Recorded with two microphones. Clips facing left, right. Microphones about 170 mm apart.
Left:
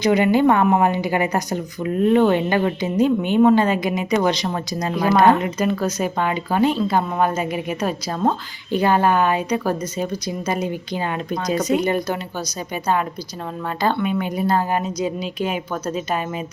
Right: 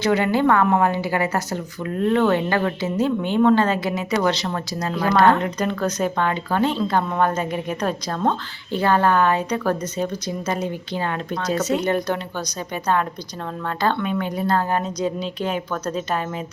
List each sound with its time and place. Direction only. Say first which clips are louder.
0.0 s speech: left 3 dB; 15° left (ahead or behind)